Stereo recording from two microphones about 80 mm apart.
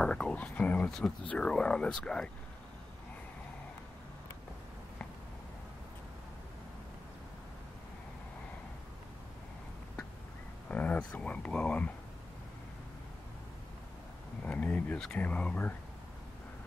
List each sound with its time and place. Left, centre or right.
0.0 s speech: centre
0.8 s speech: centre
10.7 s speech: centre
14.4 s speech: centre